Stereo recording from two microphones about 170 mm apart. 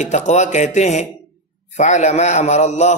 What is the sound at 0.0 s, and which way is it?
A man's voice, 45° left (ahead or behind).